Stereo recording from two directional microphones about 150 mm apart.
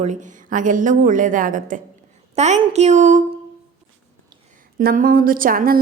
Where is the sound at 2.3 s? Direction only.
45° right (ahead or behind).